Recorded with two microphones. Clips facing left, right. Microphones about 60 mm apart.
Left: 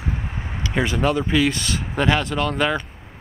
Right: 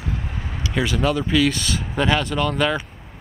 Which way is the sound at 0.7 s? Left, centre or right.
Left.